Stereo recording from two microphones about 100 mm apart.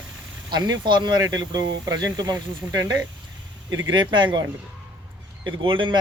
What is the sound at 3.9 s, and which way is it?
Speech, 50° right (ahead or behind).